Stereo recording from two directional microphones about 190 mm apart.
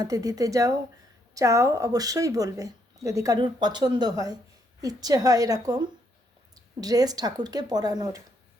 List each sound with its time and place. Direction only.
0.0 s speech: 15° right (ahead or behind)